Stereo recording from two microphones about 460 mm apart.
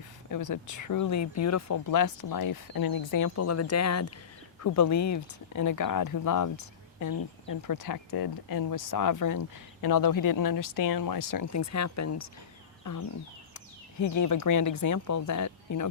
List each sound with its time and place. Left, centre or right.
0.3 s speech: left
12.8 s a sound: left
14.0 s speech: left